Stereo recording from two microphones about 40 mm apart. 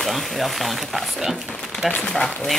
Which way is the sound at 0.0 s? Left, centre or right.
Centre.